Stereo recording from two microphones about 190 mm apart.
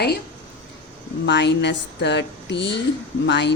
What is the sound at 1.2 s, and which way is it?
A woman's voice, 65° left (ahead or behind).